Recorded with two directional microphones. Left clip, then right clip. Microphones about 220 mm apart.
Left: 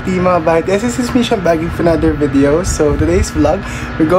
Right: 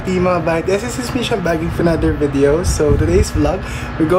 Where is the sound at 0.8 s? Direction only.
30° left (ahead or behind).